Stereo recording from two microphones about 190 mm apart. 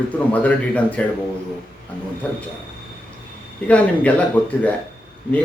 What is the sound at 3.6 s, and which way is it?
Speech, 5° left (ahead or behind).